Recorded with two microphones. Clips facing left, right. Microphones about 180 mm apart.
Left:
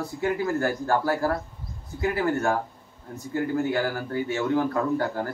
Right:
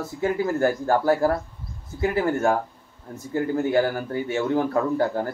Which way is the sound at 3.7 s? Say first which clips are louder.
Right 4 dB; 25° right (ahead or behind).